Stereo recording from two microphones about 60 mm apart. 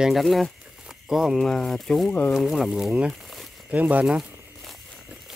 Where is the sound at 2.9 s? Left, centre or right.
Centre.